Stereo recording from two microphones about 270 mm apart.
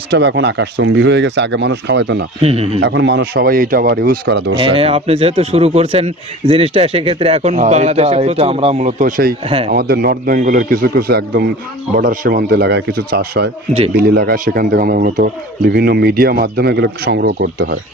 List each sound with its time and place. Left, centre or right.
0.1 s a man's voice: right
2.4 s a man's voice: right
2.8 s a man's voice: right
4.6 s a man's voice: right